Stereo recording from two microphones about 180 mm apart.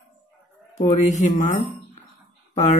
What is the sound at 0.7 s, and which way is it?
A man's voice, 40° left (ahead or behind).